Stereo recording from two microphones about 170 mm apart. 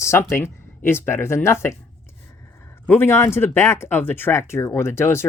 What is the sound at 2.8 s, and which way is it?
Speech, 15° left (ahead or behind).